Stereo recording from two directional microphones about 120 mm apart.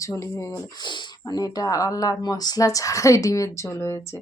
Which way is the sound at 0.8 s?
40° left (ahead or behind).